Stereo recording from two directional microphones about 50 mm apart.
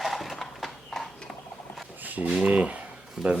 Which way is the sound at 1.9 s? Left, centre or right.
Right.